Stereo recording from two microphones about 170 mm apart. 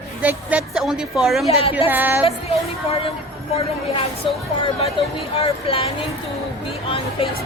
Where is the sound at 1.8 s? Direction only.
10° right (ahead or behind).